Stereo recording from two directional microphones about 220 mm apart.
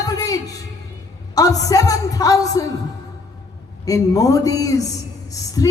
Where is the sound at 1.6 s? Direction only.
15° left (ahead or behind).